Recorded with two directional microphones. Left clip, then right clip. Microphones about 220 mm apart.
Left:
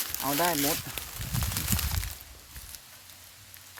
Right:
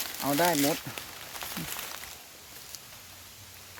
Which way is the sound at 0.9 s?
55° left (ahead or behind).